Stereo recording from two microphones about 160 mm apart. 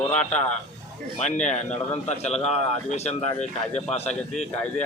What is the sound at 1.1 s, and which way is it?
A man's voice, 45° left (ahead or behind).